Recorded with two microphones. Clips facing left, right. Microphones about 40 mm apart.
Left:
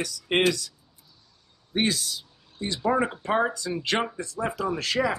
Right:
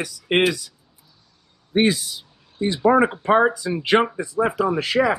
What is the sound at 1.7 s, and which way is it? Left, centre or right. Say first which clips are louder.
Speech: right 7 dB; centre.